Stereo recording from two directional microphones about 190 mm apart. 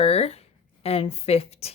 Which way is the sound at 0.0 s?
30° left (ahead or behind).